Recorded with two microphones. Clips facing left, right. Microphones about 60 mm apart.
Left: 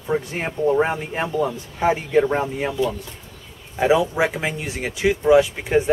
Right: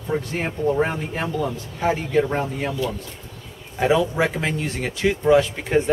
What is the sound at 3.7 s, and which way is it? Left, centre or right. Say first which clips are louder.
Speech: left 1 dB; centre.